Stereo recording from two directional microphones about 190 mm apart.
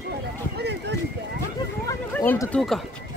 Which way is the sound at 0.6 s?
65° right (ahead or behind).